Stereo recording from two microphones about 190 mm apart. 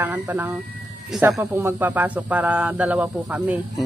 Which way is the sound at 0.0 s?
10° right (ahead or behind).